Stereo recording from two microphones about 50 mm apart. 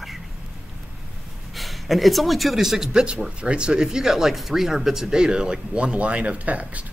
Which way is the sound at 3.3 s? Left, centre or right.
Centre.